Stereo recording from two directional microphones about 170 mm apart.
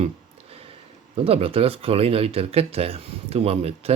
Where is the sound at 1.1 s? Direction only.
35° right (ahead or behind).